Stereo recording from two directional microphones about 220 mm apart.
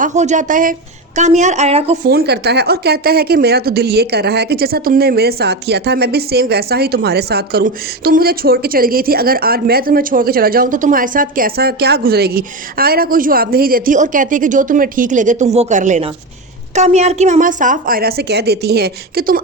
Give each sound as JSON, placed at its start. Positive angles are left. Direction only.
{"t": 0.0, "sound": "a woman's voice", "side_deg": -30}
{"t": 2.0, "sound": "a woman's voice", "side_deg": -45}